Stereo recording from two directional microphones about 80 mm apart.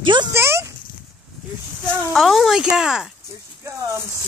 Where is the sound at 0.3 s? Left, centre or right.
Right.